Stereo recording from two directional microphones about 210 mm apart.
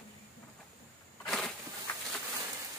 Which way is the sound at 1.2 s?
Centre (ahead or behind).